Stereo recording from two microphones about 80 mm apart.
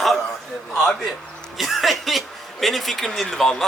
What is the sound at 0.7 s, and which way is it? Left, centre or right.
A man's voice, centre.